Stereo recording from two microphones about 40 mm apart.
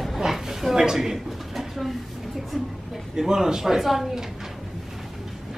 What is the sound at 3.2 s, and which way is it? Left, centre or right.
A man's voice, centre.